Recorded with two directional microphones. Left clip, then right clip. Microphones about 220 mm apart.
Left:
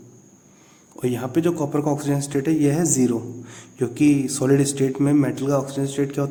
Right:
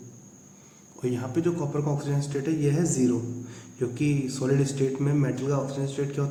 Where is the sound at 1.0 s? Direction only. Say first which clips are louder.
Left 6 dB; 50° left (ahead or behind).